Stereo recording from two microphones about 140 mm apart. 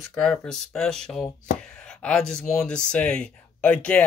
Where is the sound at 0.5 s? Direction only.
5° left (ahead or behind).